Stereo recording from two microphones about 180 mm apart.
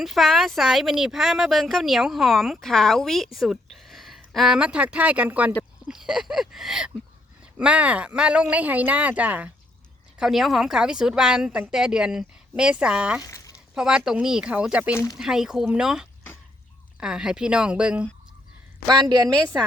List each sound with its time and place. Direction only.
0.0 s speech: centre (ahead or behind)
13.2 s a sound: 20° left (ahead or behind)
13.7 s speech: 5° right (ahead or behind)
18.9 s a woman's voice: 20° right (ahead or behind)